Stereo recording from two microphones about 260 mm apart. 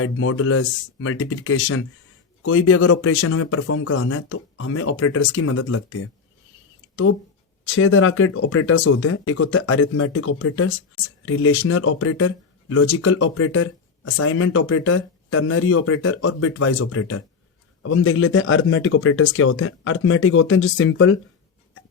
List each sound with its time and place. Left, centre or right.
0.0 s speech: left